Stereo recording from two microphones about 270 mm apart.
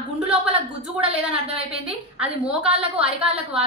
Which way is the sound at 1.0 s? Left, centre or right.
Right.